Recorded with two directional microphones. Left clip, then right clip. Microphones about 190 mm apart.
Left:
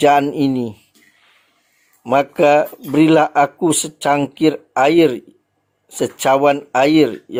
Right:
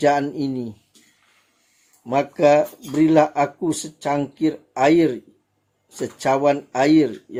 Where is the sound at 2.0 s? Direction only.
25° left (ahead or behind).